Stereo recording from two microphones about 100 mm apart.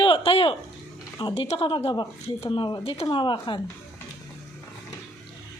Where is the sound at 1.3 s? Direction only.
75° left (ahead or behind).